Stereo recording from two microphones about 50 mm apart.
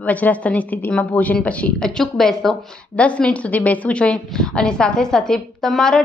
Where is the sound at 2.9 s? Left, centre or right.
Left.